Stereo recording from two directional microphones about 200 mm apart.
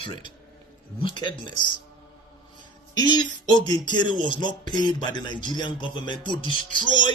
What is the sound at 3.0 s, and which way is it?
Speech, 20° left (ahead or behind).